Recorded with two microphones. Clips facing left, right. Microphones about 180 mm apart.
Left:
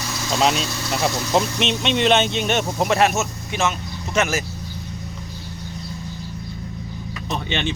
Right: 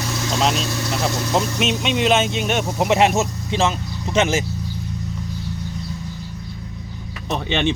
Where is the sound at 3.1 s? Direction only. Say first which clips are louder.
Right 4 dB; 30° right (ahead or behind).